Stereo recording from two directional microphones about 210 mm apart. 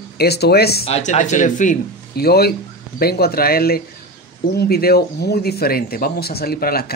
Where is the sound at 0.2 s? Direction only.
50° left (ahead or behind).